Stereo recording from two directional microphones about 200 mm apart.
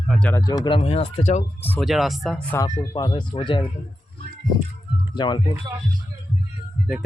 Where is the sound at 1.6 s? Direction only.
5° left (ahead or behind).